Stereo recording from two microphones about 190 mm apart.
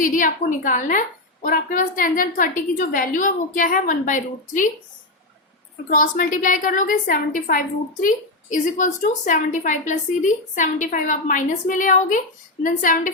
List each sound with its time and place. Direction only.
0.0 s a woman's voice: 45° left (ahead or behind)
5.9 s a woman's voice: 45° left (ahead or behind)